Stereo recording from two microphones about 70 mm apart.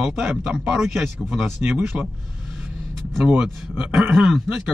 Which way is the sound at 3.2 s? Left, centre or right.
Centre.